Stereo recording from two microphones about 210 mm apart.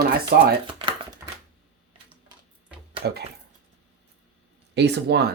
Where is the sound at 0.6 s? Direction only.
25° right (ahead or behind).